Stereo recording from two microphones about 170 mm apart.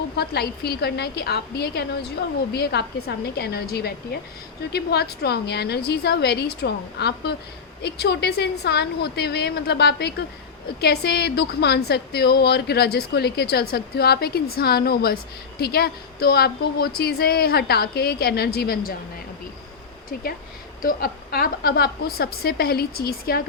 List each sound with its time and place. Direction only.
0.2 s a woman's voice: 70° left (ahead or behind)
20.8 s a woman's voice: 60° left (ahead or behind)